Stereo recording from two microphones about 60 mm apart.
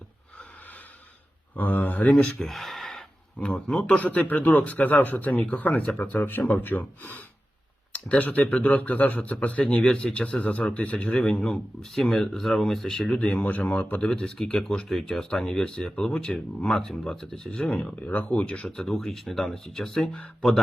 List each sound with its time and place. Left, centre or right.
1.5 s a man's voice: left
2.1 s speech: centre
2.4 s a sound: centre
3.3 s a man's voice: centre
7.9 s a man's voice: left
11.5 s speech: centre
13.1 s speech: centre
13.4 s speech: left; by 20.2 s centre